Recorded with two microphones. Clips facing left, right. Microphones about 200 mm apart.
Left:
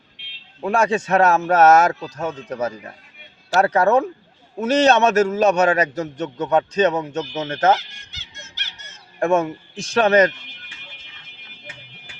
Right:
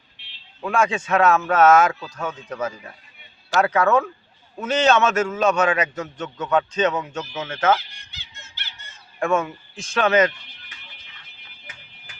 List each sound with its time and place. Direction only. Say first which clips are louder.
0.6 s speech: left 3 dB; 40° left (ahead or behind)
7.8 s goose: left 2 dB; 80° left
9.1 s speech: left 4 dB; 40° left (ahead or behind)